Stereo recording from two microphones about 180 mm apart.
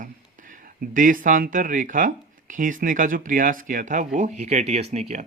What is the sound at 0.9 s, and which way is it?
Speech, 50° right (ahead or behind).